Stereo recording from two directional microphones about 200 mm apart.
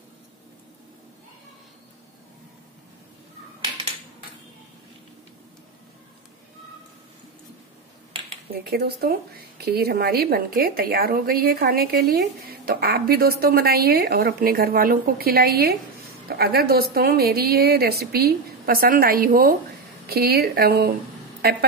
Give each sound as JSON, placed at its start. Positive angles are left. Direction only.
{"t": 8.5, "sound": "speech", "side_deg": -50}